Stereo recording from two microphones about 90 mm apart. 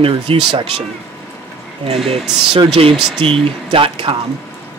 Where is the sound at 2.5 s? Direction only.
90° right.